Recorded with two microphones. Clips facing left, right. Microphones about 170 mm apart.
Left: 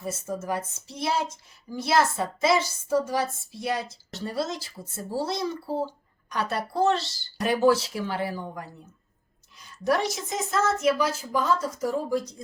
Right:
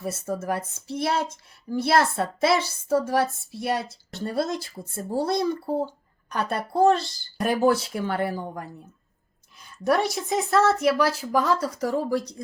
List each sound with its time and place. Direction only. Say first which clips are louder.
0.1 s speech: right 1 dB; 60° right (ahead or behind)
9.8 s speech: right 2 dB; 60° right (ahead or behind)